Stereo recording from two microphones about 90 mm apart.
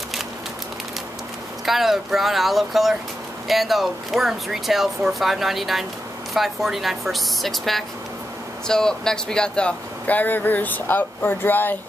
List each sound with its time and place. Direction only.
1.7 s speech: 5° right (ahead or behind); by 11.7 s 20° left (ahead or behind)